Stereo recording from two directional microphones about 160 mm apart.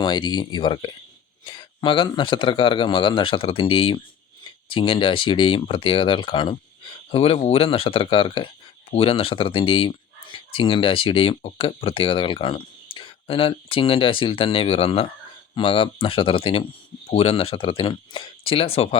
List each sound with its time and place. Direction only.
0.0 s speech: 25° left (ahead or behind)